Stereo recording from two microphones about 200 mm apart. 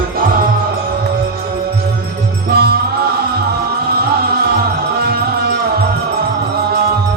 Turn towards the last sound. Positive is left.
turn(degrees=-55)  # may be behind; listen again after turning